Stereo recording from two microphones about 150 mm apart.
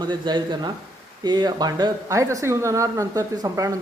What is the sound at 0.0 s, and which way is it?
Speech, 30° right (ahead or behind).